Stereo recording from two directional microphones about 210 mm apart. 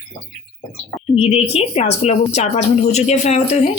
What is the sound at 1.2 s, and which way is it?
Speech, 30° left (ahead or behind).